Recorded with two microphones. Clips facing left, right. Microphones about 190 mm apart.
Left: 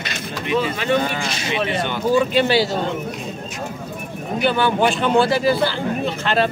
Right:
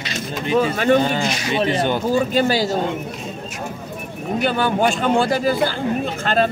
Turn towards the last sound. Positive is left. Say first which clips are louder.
# even
turn(degrees=-45)  # may be behind; listen again after turning